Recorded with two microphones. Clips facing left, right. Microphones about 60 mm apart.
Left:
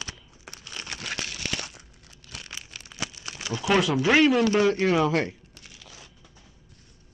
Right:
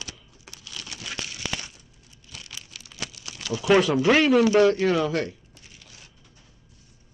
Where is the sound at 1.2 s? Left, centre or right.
Left.